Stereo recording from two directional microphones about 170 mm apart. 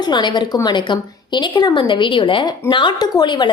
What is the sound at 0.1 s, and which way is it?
A woman's voice, 25° left (ahead or behind).